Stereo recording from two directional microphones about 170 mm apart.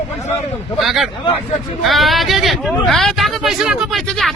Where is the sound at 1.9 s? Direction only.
Centre (ahead or behind).